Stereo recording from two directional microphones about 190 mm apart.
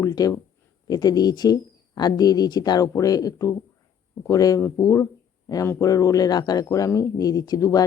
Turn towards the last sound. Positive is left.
turn(degrees=20)  # may be behind; listen again after turning